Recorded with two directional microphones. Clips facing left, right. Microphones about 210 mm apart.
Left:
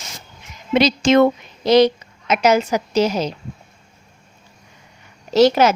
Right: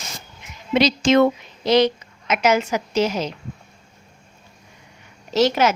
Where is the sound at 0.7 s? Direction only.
55° left (ahead or behind); by 3.3 s 35° left (ahead or behind).